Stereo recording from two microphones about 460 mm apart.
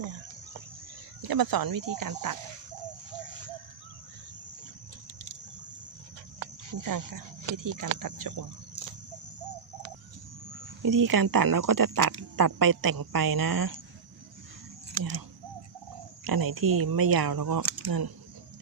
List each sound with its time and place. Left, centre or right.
1.3 s speech: right
6.7 s speech: right
10.8 s speech: right
16.2 s speech: right